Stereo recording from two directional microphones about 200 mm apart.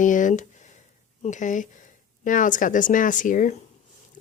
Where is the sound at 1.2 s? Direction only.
40° left (ahead or behind).